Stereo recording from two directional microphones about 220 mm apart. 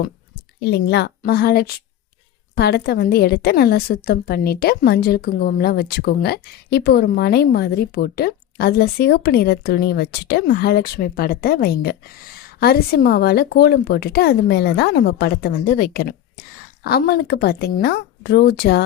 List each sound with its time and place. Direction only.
0.6 s a woman's voice: 50° left (ahead or behind)